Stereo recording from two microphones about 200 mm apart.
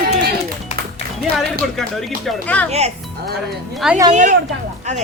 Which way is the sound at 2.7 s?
30° right (ahead or behind).